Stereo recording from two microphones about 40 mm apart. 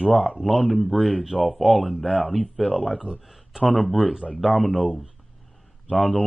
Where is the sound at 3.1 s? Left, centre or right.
Centre.